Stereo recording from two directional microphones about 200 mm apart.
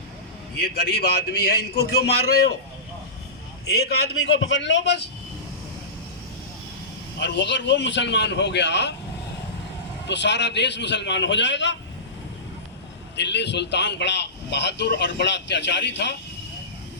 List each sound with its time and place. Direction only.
0.6 s a man's voice: 50° left (ahead or behind)
3.7 s a man's voice: 50° left (ahead or behind)
7.2 s a man's voice: 60° left (ahead or behind)
10.1 s a man's voice: 60° left (ahead or behind)
13.1 s a man's voice: 60° left (ahead or behind)